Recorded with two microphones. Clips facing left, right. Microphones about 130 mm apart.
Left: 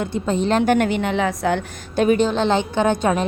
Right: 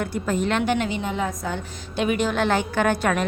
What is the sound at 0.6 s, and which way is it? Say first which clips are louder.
A woman's voice: left 6 dB; 50° left (ahead or behind).